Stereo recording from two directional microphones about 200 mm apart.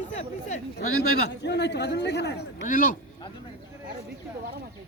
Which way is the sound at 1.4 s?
60° left (ahead or behind).